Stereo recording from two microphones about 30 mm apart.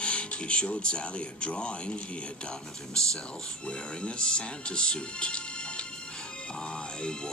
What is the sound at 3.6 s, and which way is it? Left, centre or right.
Speech, left.